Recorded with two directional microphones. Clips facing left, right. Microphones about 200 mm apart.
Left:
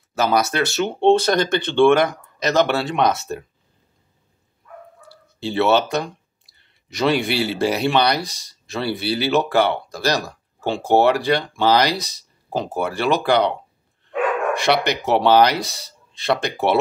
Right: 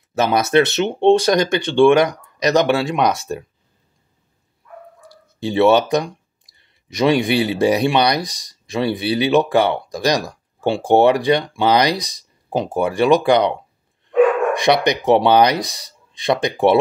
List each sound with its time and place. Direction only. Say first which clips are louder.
0.3 s speech: right 6 dB; 20° right (ahead or behind)
5.0 s speech: right 3 dB; 15° right (ahead or behind)